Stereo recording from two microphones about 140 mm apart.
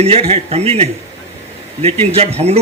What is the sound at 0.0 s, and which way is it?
Speech, 45° right (ahead or behind).